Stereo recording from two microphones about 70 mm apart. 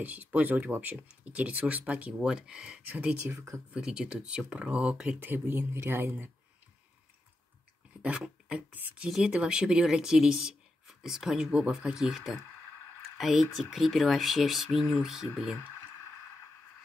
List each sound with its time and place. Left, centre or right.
0.0 s speech: right
3.3 s speech: right
3.7 s speech: centre; by 6.1 s right
8.0 s speech: centre